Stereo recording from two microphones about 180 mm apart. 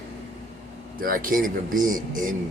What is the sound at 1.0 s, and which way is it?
Speech, 50° right (ahead or behind).